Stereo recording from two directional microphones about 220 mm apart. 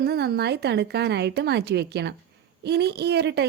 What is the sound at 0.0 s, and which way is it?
Speech, 45° right (ahead or behind).